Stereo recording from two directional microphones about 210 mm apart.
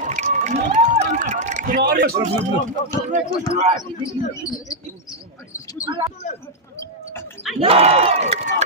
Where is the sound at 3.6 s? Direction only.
35° right (ahead or behind).